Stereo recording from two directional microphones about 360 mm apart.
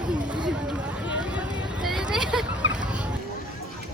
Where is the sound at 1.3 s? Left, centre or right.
Centre.